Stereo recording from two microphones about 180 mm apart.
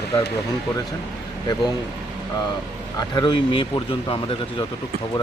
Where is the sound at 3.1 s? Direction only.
25° left (ahead or behind).